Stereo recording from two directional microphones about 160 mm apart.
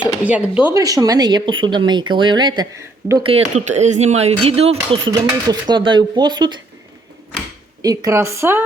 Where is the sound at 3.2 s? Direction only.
45° right (ahead or behind).